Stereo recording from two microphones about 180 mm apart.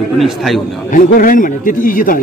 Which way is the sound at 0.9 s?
50° left (ahead or behind).